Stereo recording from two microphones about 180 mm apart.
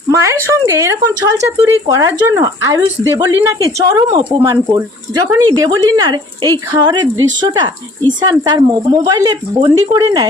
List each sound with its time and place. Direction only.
0.1 s speech: 15° right (ahead or behind)